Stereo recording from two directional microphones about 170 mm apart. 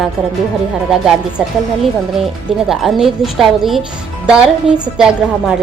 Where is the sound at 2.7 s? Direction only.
Centre (ahead or behind).